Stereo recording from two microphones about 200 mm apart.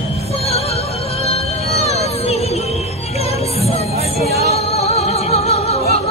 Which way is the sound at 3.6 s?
30° left (ahead or behind).